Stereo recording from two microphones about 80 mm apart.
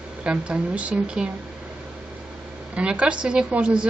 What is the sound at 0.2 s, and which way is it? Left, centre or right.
A woman's voice, centre.